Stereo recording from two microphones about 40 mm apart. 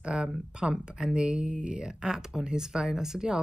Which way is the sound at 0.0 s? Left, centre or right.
Right.